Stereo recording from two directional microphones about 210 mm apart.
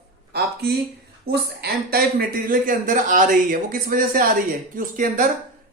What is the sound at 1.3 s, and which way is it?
Speech, 50° right (ahead or behind).